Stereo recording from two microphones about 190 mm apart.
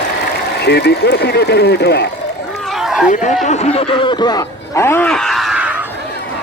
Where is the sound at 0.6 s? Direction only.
60° left (ahead or behind).